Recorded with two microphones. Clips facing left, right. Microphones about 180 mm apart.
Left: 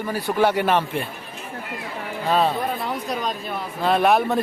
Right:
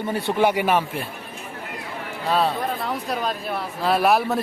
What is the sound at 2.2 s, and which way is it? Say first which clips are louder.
Speech: left 1 dB; centre (ahead or behind).